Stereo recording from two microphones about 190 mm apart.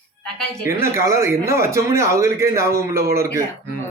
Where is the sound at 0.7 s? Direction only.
15° right (ahead or behind).